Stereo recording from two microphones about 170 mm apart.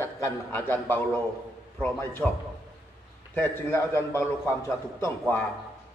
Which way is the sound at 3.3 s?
15° left (ahead or behind).